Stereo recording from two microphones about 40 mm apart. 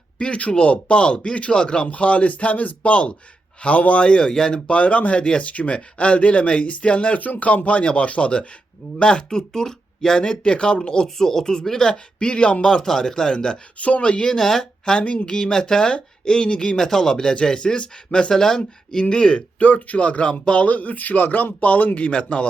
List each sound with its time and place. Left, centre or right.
0.2 s speech: left
4.0 s speech: left
4.6 s speech: left
5.2 s speech: left
5.5 s speech: left; by 10.2 s centre
10.2 s speech: left
12.6 s speech: centre
13.7 s speech: left
19.5 s speech: left
22.1 s speech: left